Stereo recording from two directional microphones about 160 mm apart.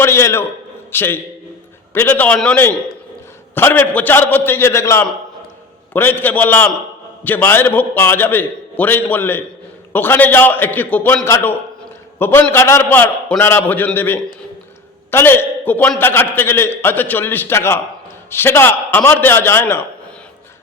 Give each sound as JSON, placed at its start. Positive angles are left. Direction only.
{"t": 0.0, "sound": "a man's voice", "side_deg": 15}